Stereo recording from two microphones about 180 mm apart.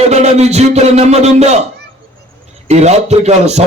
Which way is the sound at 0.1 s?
40° right (ahead or behind).